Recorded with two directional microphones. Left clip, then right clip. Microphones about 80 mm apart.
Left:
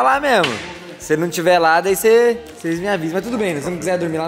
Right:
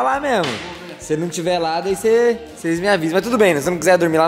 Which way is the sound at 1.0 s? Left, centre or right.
Left.